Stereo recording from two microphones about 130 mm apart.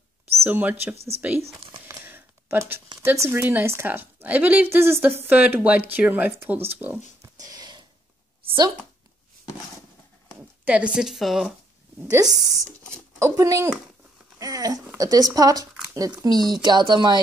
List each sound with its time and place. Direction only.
0.4 s a woman's voice: 15° right (ahead or behind)
0.9 s speech: 50° right (ahead or behind)
1.9 s a sound: 15° right (ahead or behind)
3.0 s a woman's voice: 20° right (ahead or behind)
7.3 s a sound: 30° right (ahead or behind)
10.6 s speech: 10° right (ahead or behind)
12.0 s speech: 25° right (ahead or behind)
14.4 s a sound: 30° right (ahead or behind)
15.0 s speech: 30° right (ahead or behind)